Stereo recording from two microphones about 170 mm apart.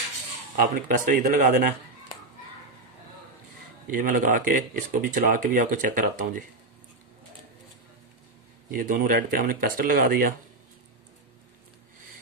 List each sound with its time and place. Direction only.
0.6 s speech: 50° right (ahead or behind)
3.8 s speech: 50° right (ahead or behind)
8.7 s speech: 50° right (ahead or behind)